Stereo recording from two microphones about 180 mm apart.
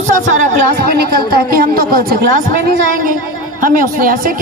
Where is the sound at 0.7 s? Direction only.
60° right (ahead or behind).